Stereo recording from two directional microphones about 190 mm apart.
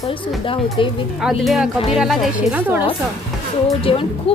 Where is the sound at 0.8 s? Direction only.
25° left (ahead or behind).